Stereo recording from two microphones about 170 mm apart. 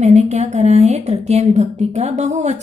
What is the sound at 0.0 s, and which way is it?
Speech, 45° right (ahead or behind).